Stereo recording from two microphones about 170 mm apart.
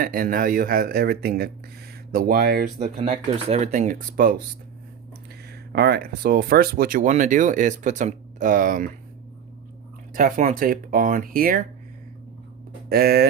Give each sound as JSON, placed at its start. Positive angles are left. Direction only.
{"t": 0.0, "sound": "speech", "side_deg": -55}
{"t": 3.0, "sound": "speech", "side_deg": -35}
{"t": 5.5, "sound": "speech", "side_deg": -65}
{"t": 10.2, "sound": "speech", "side_deg": -55}
{"t": 12.9, "sound": "speech", "side_deg": -65}